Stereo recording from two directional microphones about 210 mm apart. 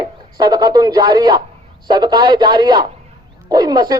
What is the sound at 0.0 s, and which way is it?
Speech, 20° right (ahead or behind).